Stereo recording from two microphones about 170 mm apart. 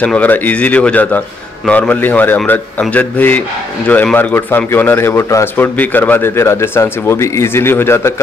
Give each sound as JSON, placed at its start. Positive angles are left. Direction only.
{"t": 0.0, "sound": "a man's voice", "side_deg": 10}